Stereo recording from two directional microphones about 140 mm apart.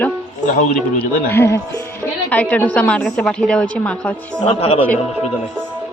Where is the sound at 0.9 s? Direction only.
15° left (ahead or behind).